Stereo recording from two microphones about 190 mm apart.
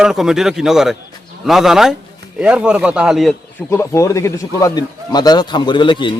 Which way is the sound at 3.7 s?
15° left (ahead or behind).